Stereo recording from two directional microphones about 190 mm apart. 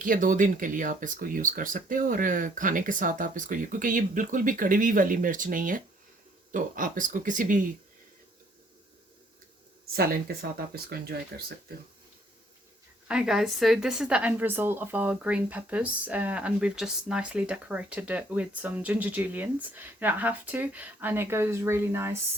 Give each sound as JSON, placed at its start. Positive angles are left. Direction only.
{"t": 0.0, "sound": "speech", "side_deg": -45}
{"t": 9.9, "sound": "speech", "side_deg": -55}
{"t": 13.1, "sound": "a woman's voice", "side_deg": -5}